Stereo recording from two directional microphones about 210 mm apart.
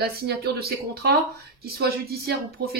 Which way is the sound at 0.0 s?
50° right (ahead or behind).